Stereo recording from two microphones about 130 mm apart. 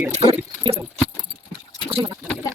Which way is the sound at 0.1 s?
50° right (ahead or behind).